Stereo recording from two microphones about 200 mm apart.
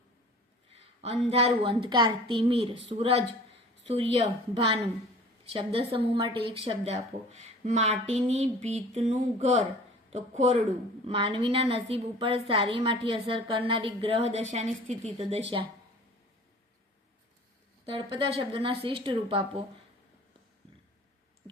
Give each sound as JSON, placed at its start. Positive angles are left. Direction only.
{"t": 0.7, "sound": "a woman's voice", "side_deg": -30}
{"t": 17.8, "sound": "a woman's voice", "side_deg": -25}